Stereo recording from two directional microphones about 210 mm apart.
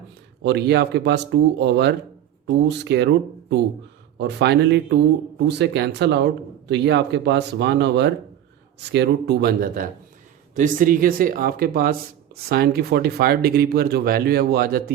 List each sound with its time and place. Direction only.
0.4 s speech: 55° right (ahead or behind)
4.2 s speech: 55° right (ahead or behind)